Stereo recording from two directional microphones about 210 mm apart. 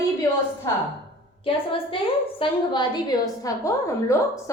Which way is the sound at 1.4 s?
25° left (ahead or behind).